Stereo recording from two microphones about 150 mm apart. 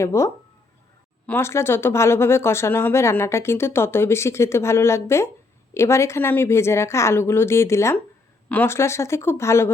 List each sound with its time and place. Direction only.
0.0 s speech: 20° left (ahead or behind)
1.3 s speech: 15° left (ahead or behind)